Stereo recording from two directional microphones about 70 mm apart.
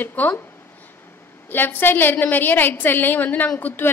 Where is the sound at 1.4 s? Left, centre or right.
Left.